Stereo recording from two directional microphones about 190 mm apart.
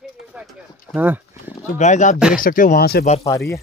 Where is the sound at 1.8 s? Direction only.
40° left (ahead or behind).